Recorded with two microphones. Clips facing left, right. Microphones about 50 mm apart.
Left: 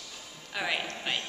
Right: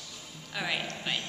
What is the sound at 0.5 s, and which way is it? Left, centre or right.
Speech, centre.